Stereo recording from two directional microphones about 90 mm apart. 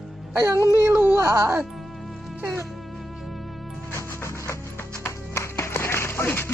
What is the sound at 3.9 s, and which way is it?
Music, 30° left (ahead or behind).